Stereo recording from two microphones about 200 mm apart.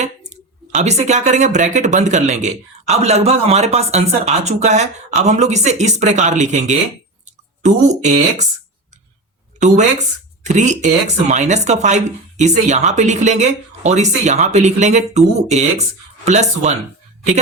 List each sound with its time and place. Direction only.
0.3 s speech: 35° right (ahead or behind)
7.9 s speech: 35° right (ahead or behind)
9.6 s speech: 35° right (ahead or behind)